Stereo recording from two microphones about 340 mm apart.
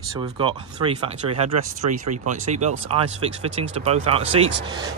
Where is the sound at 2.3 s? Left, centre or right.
Centre.